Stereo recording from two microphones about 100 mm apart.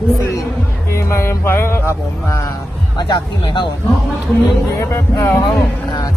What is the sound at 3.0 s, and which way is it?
Speech, 50° left (ahead or behind).